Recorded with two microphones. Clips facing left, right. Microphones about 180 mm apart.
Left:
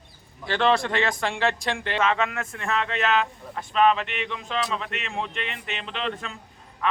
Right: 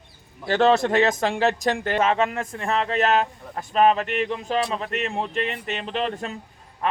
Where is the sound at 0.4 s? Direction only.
45° right (ahead or behind).